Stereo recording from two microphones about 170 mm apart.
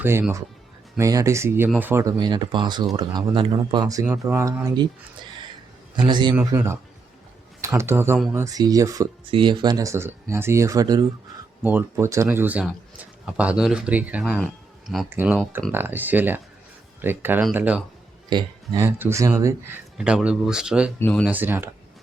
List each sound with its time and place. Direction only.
0.0 s speech: 15° right (ahead or behind)
6.0 s speech: 25° right (ahead or behind); by 17.8 s 10° right (ahead or behind)
18.3 s speech: 25° right (ahead or behind); by 20.9 s 5° right (ahead or behind)
21.0 s speech: 5° left (ahead or behind)
21.2 s speech: 10° right (ahead or behind)